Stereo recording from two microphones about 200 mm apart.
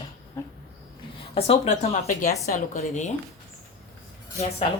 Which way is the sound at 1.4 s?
30° left (ahead or behind).